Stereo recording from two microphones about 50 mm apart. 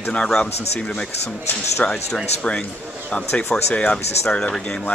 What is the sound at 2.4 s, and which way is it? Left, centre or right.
Speech, left.